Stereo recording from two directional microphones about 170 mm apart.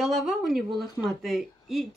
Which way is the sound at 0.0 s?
5° right (ahead or behind).